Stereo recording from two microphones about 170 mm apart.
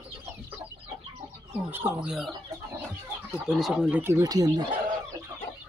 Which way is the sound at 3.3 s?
Centre (ahead or behind).